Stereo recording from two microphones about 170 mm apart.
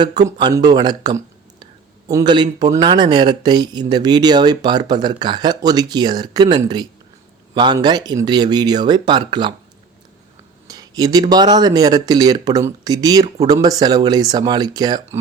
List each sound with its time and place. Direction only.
0.0 s speech: 25° right (ahead or behind)
10.7 s speech: 20° right (ahead or behind)